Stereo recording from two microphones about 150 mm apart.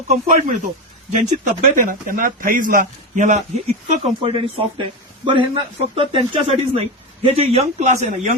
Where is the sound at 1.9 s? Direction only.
65° right (ahead or behind); by 4.3 s 40° right (ahead or behind).